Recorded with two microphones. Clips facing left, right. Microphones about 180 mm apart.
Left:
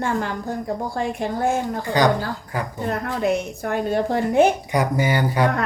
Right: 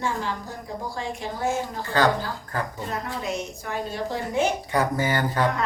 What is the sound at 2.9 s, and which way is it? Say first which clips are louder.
A woman's voice: left 11 dB; 60° left (ahead or behind).